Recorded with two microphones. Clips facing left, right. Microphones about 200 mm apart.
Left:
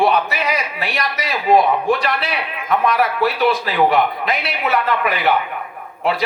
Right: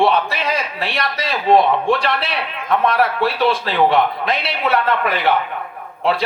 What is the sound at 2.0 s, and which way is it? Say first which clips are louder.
A woman's voice: even; 30° right (ahead or behind).